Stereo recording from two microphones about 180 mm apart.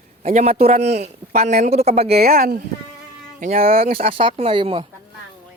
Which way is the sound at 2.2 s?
55° right (ahead or behind).